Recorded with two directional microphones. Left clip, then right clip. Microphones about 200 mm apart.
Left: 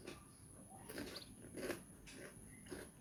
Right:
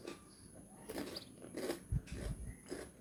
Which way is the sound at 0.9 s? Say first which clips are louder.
Right 4 dB; 10° right (ahead or behind).